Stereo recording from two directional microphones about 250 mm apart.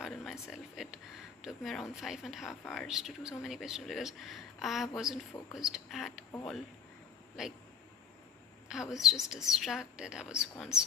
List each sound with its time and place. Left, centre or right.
0.0 s a sound: centre
1.4 s speech: centre
8.7 s speech: centre